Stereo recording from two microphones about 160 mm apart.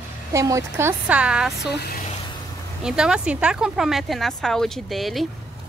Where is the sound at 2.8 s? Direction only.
5° right (ahead or behind).